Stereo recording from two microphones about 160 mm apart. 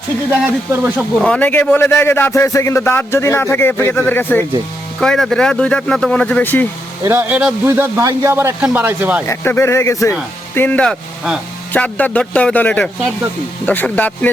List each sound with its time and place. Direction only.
0.3 s speech: 10° right (ahead or behind)
0.9 s a man's voice: 5° left (ahead or behind)
7.0 s speech: 15° right (ahead or behind)
9.2 s a man's voice: 15° left (ahead or behind)